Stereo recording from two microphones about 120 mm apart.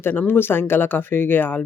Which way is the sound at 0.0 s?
15° left (ahead or behind).